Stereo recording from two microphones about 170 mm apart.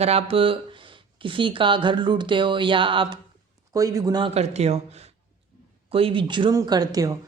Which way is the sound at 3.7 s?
20° right (ahead or behind).